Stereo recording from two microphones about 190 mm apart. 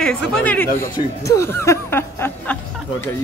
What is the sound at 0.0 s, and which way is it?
Speech, 5° left (ahead or behind).